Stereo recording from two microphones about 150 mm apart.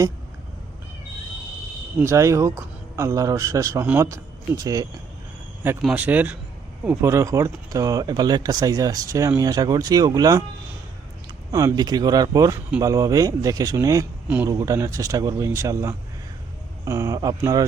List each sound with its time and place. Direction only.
2.0 s speech: 20° right (ahead or behind)
5.8 s speech: 10° right (ahead or behind)
11.5 s speech: 25° right (ahead or behind)
14.3 s speech: 10° right (ahead or behind)
14.5 s speech: 20° right (ahead or behind)